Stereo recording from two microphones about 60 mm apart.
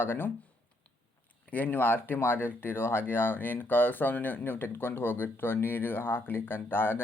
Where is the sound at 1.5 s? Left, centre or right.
Left.